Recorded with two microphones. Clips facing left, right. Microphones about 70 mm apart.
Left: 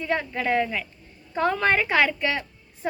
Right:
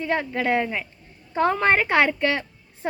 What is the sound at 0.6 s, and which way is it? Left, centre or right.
Speech, right.